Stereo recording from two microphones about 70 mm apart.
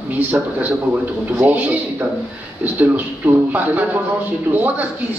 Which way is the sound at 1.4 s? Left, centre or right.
Right.